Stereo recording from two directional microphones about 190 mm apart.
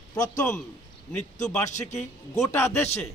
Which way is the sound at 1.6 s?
40° left (ahead or behind).